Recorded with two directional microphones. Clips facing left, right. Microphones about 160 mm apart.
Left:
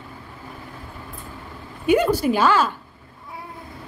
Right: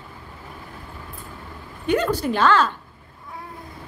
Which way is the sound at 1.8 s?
10° left (ahead or behind).